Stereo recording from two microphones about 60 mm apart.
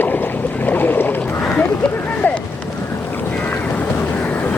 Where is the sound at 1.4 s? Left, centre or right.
Centre.